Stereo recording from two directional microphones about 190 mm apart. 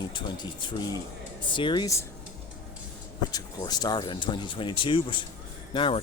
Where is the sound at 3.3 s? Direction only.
20° left (ahead or behind).